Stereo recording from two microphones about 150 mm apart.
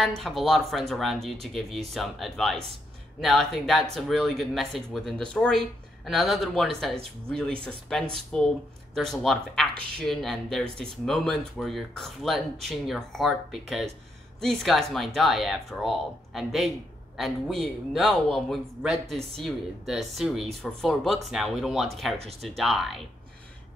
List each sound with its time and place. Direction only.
0.0 s speech: centre (ahead or behind)